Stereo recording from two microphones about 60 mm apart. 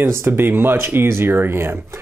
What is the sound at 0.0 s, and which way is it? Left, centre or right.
Speech, right.